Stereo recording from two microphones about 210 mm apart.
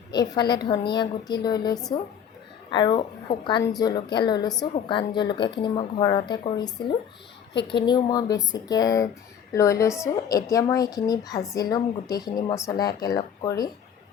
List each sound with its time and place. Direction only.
0.1 s speech: 20° left (ahead or behind)